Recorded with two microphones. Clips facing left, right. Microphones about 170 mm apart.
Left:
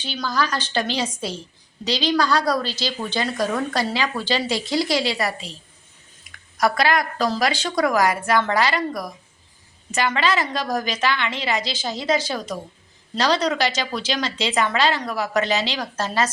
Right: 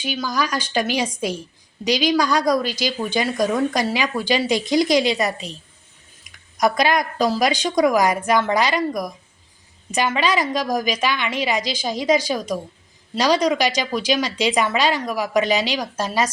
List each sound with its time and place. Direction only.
0.0 s a woman's voice: 10° right (ahead or behind)
6.3 s a sound: 25° left (ahead or behind)
6.6 s a woman's voice: 20° right (ahead or behind)